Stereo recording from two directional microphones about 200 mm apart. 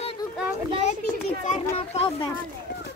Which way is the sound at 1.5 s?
30° left (ahead or behind).